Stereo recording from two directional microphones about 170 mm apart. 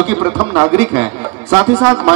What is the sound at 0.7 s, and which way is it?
A man's voice, 10° right (ahead or behind).